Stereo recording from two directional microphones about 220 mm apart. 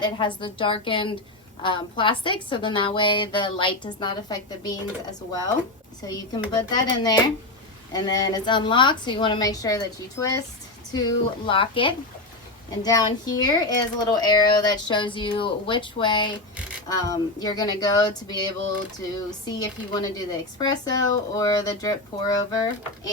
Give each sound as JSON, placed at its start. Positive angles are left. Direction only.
{"t": 0.0, "sound": "a child's voice", "side_deg": 20}
{"t": 6.0, "sound": "a child's voice", "side_deg": 20}
{"t": 19.5, "sound": "speech", "side_deg": 15}